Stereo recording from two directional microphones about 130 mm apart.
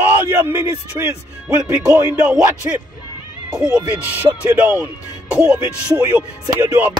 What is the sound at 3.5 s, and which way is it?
Speech, 10° right (ahead or behind).